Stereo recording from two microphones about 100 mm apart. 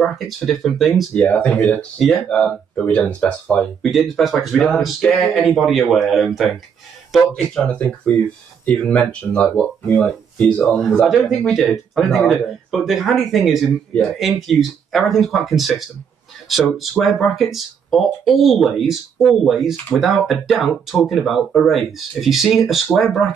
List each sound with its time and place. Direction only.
0.0 s speech: centre (ahead or behind)
1.1 s speech: 15° left (ahead or behind)
3.9 s speech: centre (ahead or behind)
7.6 s speech: 15° left (ahead or behind); by 23.3 s centre (ahead or behind)